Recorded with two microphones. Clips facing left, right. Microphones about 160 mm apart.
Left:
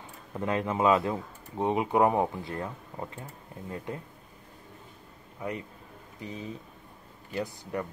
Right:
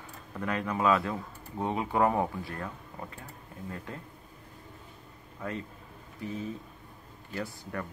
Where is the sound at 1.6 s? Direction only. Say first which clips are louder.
Left 3 dB; 20° left (ahead or behind).